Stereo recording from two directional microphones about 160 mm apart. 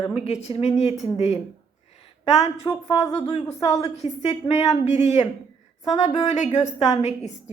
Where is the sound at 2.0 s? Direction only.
45° left (ahead or behind).